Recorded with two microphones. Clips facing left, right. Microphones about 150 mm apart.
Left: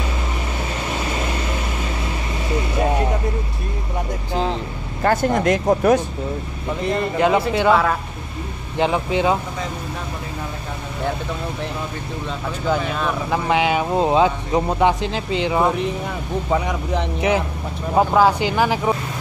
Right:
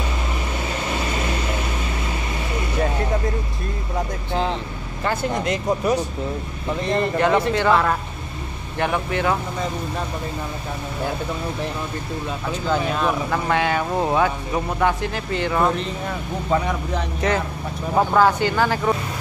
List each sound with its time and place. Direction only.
5.0 s speech: 50° left (ahead or behind)
6.9 s speech: 10° left (ahead or behind)
8.7 s speech: 20° left (ahead or behind)
12.6 s speech: centre (ahead or behind)
13.3 s speech: 15° left (ahead or behind)